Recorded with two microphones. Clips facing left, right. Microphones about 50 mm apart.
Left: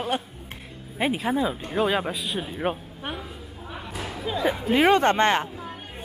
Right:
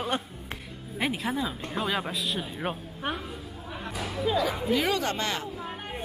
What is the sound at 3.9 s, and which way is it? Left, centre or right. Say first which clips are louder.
Music: left 1 dB; left.